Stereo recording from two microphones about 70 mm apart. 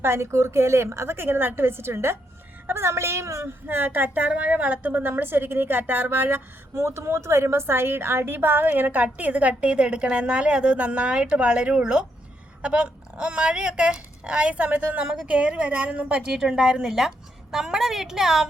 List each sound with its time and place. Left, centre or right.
0.0 s a woman's voice: right
3.7 s a woman's voice: right; by 18.4 s centre